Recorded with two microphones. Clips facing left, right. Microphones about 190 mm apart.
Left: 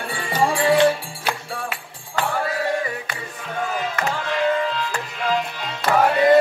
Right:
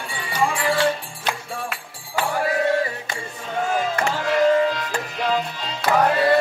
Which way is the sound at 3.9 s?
40° right (ahead or behind).